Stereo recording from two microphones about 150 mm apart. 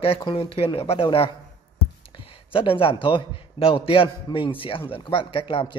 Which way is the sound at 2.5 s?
35° left (ahead or behind).